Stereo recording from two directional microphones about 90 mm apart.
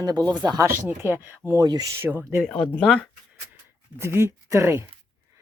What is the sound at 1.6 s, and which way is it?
Speech, 40° right (ahead or behind).